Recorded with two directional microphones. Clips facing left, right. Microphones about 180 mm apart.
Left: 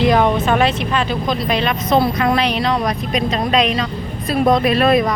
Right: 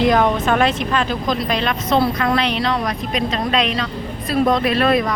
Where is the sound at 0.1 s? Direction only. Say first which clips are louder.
Left 1 dB; 5° left (ahead or behind).